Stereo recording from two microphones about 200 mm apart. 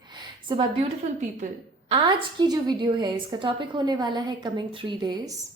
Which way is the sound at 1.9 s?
25° right (ahead or behind).